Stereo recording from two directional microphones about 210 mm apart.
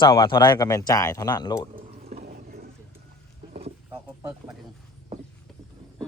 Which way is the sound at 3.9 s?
15° right (ahead or behind).